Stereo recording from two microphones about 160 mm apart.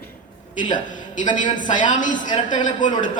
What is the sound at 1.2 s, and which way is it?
Speech, 30° left (ahead or behind).